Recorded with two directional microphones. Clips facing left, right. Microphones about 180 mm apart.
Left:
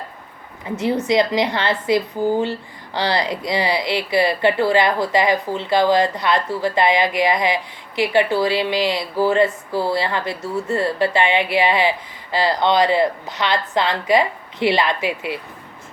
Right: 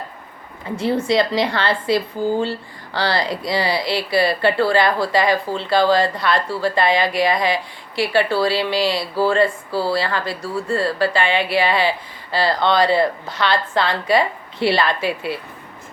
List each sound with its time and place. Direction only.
0.6 s speech: 20° left (ahead or behind)